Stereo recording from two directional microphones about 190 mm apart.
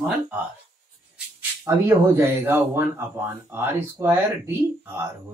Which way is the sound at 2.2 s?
10° right (ahead or behind).